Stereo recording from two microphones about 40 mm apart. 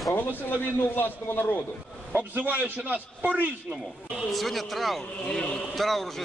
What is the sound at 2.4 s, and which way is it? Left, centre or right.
A man's voice, right.